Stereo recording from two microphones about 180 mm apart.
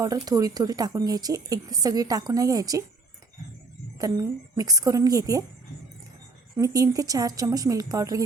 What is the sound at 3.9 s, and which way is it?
Speech, 20° right (ahead or behind).